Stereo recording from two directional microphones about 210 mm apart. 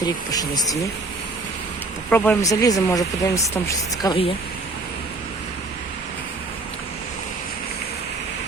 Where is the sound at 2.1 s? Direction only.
10° left (ahead or behind); by 4.3 s 25° left (ahead or behind).